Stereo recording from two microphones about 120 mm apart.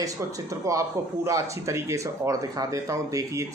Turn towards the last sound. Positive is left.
turn(degrees=-25)  # may be behind; listen again after turning